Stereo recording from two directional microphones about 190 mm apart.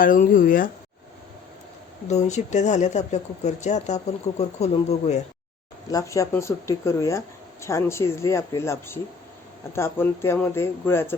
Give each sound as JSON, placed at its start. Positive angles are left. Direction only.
{"t": 0.0, "sound": "speech", "side_deg": 45}
{"t": 2.0, "sound": "speech", "side_deg": 35}
{"t": 5.9, "sound": "speech", "side_deg": 15}